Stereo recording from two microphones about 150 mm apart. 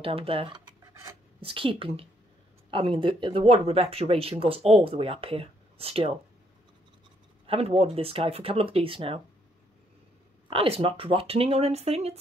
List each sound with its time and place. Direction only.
0.0 s speech: 40° right (ahead or behind)
7.4 s speech: 40° right (ahead or behind)
10.5 s speech: 40° right (ahead or behind)